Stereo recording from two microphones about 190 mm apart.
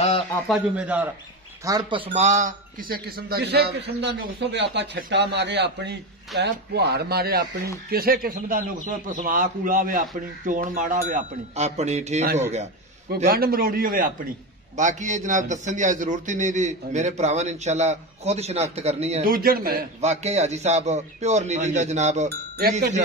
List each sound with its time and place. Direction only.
0.5 s a man's voice: 5° right (ahead or behind)
1.6 s a man's voice: 20° right (ahead or behind); by 12.3 s 35° right (ahead or behind)
13.1 s a man's voice: 55° right (ahead or behind); by 19.2 s 35° right (ahead or behind)
19.2 s a man's voice: 50° right (ahead or behind)
20.0 s a man's voice: 35° right (ahead or behind)